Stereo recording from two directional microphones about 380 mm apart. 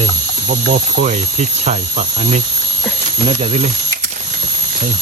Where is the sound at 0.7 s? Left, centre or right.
Centre.